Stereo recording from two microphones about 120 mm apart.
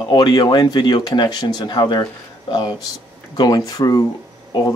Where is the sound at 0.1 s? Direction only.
35° left (ahead or behind).